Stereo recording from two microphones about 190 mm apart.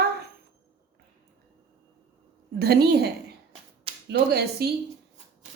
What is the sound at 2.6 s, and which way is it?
A woman's voice, 55° right (ahead or behind).